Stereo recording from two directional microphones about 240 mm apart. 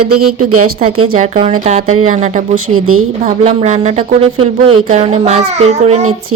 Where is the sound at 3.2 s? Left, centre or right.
Right.